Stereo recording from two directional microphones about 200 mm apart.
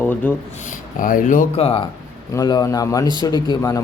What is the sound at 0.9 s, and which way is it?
Speech, 40° left (ahead or behind).